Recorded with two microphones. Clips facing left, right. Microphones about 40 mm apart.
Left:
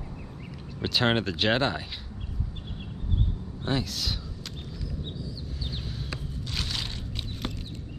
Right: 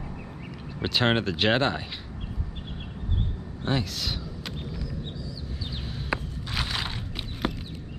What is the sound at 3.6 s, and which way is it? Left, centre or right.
Speech, centre.